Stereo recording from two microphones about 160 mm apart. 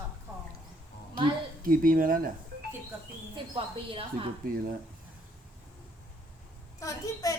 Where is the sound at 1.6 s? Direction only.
60° right (ahead or behind).